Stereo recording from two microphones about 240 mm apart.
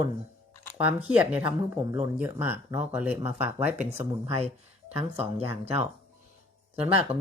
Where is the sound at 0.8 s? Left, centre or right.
Centre.